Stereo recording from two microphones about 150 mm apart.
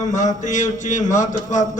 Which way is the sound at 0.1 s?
55° left (ahead or behind).